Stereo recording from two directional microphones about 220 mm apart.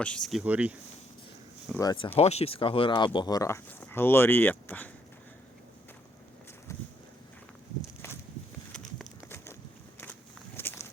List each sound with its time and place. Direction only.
0.0 s speech: 5° left (ahead or behind)
1.8 s speech: 15° left (ahead or behind)
8.7 s a sound: centre (ahead or behind)
10.6 s walk: 10° left (ahead or behind)